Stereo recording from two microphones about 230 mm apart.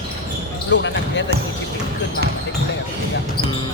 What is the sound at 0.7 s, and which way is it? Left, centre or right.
Speech, left.